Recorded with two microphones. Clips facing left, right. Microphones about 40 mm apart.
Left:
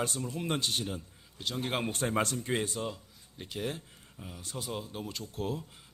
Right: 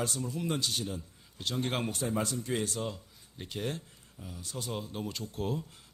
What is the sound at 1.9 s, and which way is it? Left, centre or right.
Speech, left.